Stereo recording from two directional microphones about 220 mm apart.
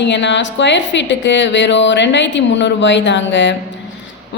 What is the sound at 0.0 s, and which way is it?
A man's voice, 55° left (ahead or behind).